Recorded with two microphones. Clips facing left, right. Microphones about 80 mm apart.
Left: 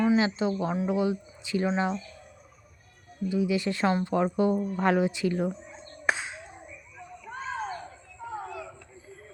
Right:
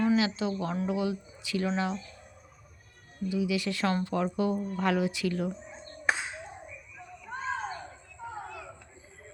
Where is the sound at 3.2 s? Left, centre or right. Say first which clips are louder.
Left 3 dB; left.